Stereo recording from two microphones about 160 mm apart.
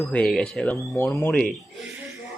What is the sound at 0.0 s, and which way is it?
Speech, 5° left (ahead or behind).